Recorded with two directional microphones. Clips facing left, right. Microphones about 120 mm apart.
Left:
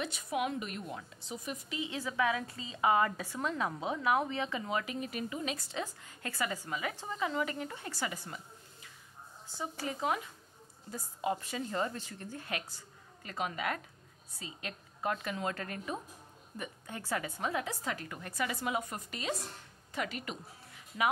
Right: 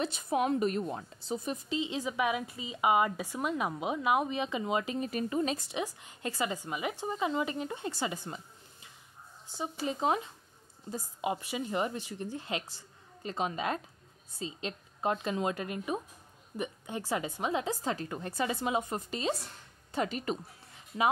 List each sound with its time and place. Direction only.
0.0 s a woman's voice: 35° right (ahead or behind)
5.0 s speech: 35° right (ahead or behind)
5.7 s a woman's voice: 20° right (ahead or behind)
9.6 s a woman's voice: 20° right (ahead or behind)